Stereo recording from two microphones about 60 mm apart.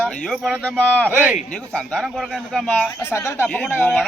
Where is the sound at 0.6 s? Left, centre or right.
Left.